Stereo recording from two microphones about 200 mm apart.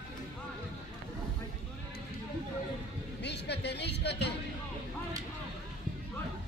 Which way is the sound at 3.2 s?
60° left (ahead or behind).